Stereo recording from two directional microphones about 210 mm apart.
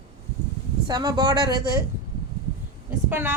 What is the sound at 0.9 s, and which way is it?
Speech, 20° right (ahead or behind).